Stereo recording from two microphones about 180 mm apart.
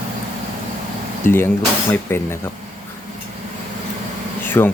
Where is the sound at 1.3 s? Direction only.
10° left (ahead or behind).